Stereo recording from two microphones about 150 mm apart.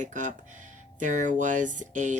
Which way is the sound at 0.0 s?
55° right (ahead or behind).